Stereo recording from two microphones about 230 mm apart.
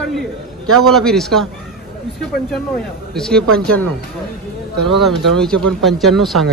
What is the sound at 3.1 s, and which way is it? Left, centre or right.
Speech, centre.